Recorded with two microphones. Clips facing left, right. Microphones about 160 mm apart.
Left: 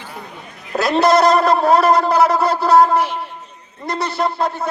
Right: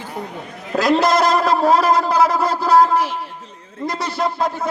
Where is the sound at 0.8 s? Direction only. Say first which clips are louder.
Left 1 dB; 90° right.